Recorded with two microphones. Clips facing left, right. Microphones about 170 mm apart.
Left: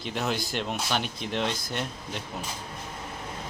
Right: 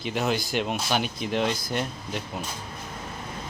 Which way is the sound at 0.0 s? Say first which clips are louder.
Right 3 dB; centre (ahead or behind).